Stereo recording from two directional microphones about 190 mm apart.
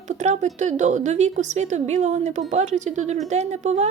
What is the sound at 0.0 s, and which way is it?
Speech, 40° right (ahead or behind).